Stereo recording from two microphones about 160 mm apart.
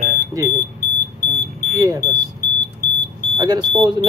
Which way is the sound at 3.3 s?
25° right (ahead or behind).